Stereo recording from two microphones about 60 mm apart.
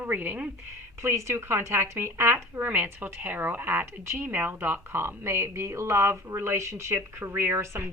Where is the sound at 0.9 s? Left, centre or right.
Right.